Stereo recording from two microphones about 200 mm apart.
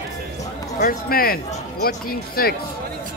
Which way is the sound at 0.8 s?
45° left (ahead or behind).